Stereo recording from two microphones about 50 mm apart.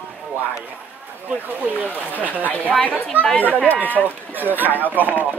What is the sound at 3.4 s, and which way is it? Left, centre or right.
Speech, left.